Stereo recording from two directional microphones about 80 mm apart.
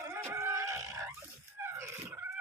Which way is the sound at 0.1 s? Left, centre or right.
Right.